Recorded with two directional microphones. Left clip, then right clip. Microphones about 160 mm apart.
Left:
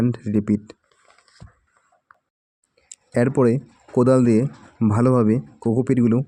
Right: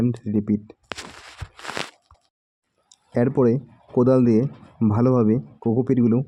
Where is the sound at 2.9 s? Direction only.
35° left (ahead or behind).